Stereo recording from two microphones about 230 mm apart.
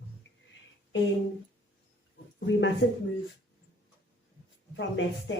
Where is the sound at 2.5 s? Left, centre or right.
Left.